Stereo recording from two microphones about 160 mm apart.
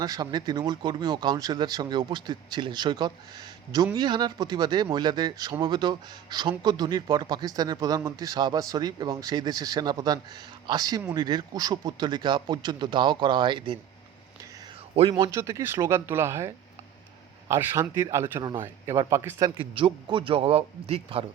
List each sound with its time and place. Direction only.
0.0 s speech: 25° right (ahead or behind)
15.1 s speech: 20° right (ahead or behind)
17.5 s speech: 20° right (ahead or behind)
19.7 s speech: 30° right (ahead or behind)